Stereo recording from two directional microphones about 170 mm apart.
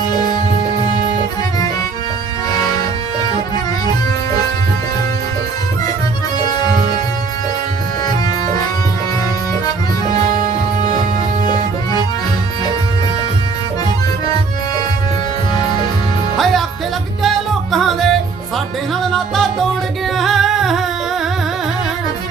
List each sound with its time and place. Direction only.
2.5 s music: 25° left (ahead or behind)
6.4 s music: 25° left (ahead or behind)
16.4 s music: centre (ahead or behind)